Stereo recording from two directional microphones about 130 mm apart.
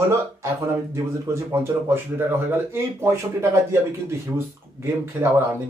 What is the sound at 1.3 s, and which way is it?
Speech, 20° right (ahead or behind).